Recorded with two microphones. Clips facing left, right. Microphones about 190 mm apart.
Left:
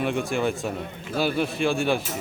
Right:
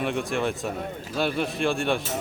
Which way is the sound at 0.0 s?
Centre (ahead or behind).